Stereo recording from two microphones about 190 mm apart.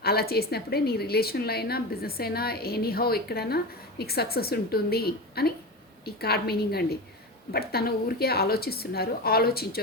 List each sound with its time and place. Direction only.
0.0 s a woman's voice: 55° left (ahead or behind)